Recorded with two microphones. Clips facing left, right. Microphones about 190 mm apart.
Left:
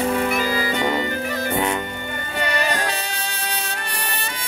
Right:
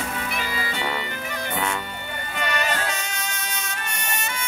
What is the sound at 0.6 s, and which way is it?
Music, 40° left (ahead or behind).